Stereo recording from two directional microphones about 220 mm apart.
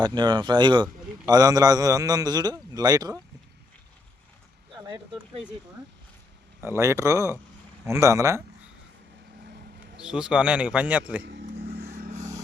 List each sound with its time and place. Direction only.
0.0 s a man's voice: 20° right (ahead or behind)
4.7 s a sound: 20° right (ahead or behind)
6.6 s a man's voice: 10° right (ahead or behind)
10.0 s a man's voice: 5° right (ahead or behind)
11.2 s speech: 55° right (ahead or behind)
11.7 s vehicle: 45° right (ahead or behind)